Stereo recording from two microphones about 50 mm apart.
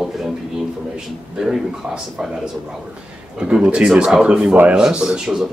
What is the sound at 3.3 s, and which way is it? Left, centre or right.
Speech, centre.